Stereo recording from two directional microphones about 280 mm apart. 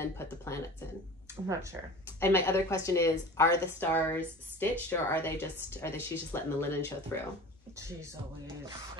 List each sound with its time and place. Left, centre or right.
0.0 s speech: centre
1.5 s music: centre
2.1 s speech: centre
8.5 s music: centre